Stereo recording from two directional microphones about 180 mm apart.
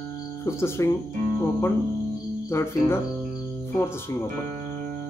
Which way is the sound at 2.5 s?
15° left (ahead or behind).